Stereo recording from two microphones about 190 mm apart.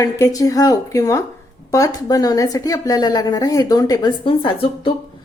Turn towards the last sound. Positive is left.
turn(degrees=30)  # may be behind; listen again after turning